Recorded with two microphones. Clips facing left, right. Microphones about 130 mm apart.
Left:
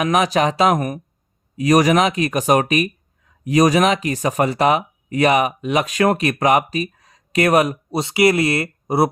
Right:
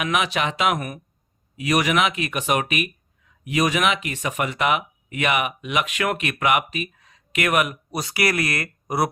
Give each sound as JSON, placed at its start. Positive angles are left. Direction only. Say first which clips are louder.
{"t": 0.0, "sound": "speech", "louder": "left 6 dB", "side_deg": 40}